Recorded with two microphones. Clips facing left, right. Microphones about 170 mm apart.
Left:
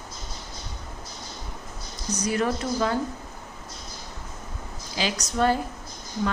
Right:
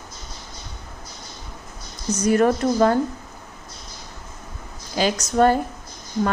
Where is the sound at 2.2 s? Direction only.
50° right (ahead or behind).